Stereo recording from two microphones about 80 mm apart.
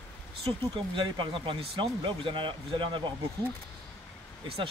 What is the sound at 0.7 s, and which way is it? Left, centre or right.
Speech, right.